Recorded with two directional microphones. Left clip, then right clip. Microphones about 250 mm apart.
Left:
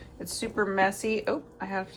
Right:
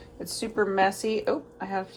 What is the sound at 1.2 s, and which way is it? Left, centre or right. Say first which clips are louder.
Speech: right 2 dB; right.